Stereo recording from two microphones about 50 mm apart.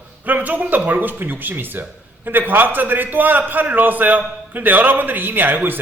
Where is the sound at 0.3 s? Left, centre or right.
Right.